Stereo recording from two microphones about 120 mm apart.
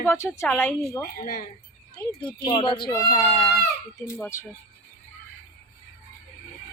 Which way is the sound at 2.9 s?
25° left (ahead or behind).